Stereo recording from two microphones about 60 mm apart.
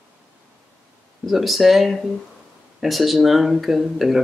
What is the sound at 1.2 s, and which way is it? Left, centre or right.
Speech, centre.